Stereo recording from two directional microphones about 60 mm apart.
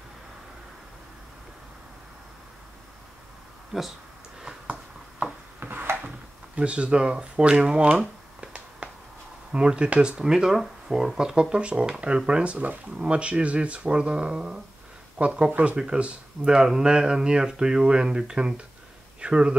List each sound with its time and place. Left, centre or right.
3.7 s speech: centre
5.2 s a sound: right
9.5 s speech: centre